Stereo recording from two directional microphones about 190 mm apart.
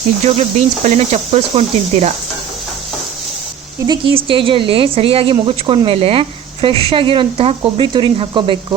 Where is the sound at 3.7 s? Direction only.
20° right (ahead or behind).